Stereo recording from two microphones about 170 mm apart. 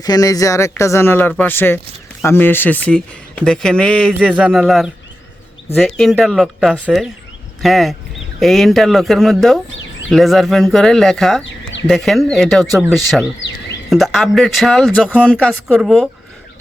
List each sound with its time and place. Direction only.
0.0 s speech: 20° left (ahead or behind); by 11.4 s centre (ahead or behind)
11.4 s a sound: 90° left
11.9 s speech: centre (ahead or behind)